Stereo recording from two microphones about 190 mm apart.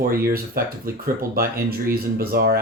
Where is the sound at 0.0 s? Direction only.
50° right (ahead or behind).